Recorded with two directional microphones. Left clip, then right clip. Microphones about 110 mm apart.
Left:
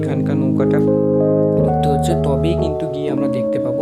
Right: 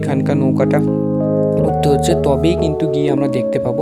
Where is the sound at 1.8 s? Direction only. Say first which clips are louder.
Right 3 dB; 50° right (ahead or behind).